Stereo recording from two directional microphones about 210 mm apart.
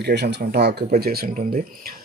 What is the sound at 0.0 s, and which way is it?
Speech, 50° right (ahead or behind).